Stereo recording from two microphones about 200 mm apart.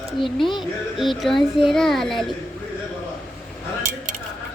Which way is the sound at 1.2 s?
Centre (ahead or behind).